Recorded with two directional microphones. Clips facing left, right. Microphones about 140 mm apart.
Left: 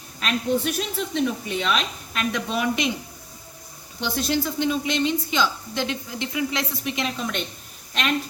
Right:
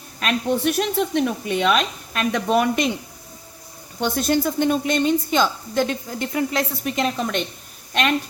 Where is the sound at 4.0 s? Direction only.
50° right (ahead or behind).